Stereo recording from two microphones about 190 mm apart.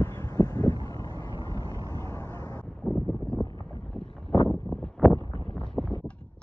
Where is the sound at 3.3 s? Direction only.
20° left (ahead or behind).